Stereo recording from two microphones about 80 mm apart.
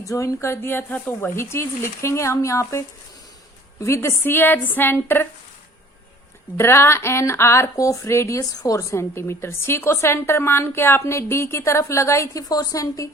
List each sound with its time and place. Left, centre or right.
0.0 s a woman's voice: left
1.4 s a woman's voice: left
6.6 s speech: left